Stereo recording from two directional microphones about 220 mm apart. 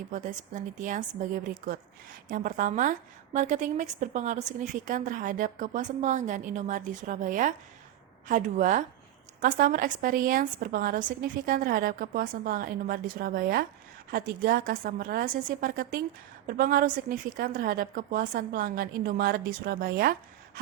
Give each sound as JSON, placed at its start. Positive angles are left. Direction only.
{"t": 0.1, "sound": "a woman's voice", "side_deg": -35}